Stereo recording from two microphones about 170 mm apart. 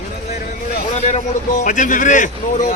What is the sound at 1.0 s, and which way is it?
Speech, 40° left (ahead or behind).